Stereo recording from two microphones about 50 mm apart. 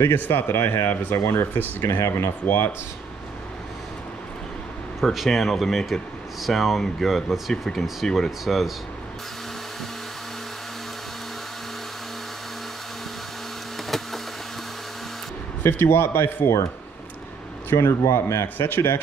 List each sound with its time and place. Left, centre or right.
0.0 s a man's voice: left
1.8 s speech: left
2.4 s a man's voice: left
5.0 s speech: centre
13.8 s insect: centre
15.6 s a man's voice: left
17.7 s speech: left